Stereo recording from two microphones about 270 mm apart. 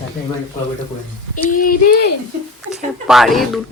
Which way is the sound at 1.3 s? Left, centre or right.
Left.